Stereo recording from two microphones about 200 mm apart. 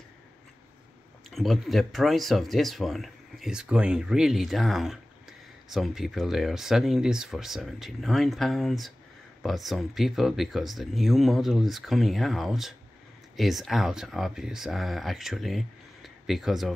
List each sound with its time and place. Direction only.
1.3 s speech: centre (ahead or behind)